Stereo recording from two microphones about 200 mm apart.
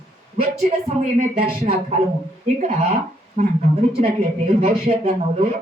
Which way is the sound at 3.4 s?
40° right (ahead or behind).